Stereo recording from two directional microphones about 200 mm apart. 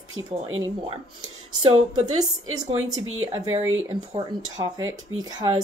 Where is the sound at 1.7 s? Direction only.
90° right.